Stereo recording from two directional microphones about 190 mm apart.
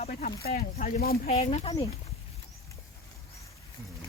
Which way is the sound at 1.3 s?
35° left (ahead or behind).